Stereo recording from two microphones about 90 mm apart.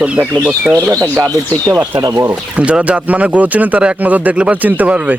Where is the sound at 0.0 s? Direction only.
15° right (ahead or behind).